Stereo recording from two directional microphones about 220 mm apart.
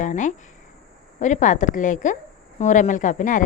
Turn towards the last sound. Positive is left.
turn(degrees=35)  # may be behind; listen again after turning